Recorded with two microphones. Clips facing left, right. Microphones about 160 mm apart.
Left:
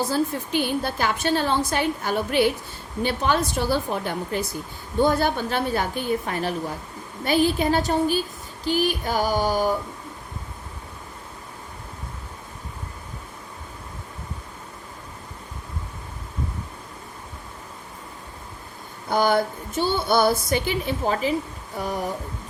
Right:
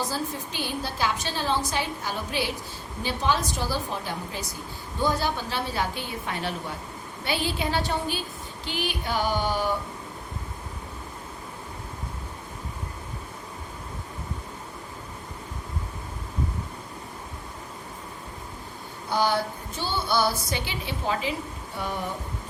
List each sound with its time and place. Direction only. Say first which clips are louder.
0.1 s a woman's voice: left 8 dB; 55° left (ahead or behind)
19.1 s speech: left 4 dB; 50° left (ahead or behind)